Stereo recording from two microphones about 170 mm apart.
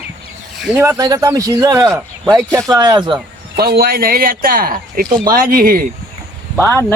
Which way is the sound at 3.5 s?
65° right (ahead or behind).